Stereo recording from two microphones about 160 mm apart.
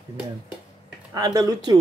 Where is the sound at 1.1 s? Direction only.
25° right (ahead or behind).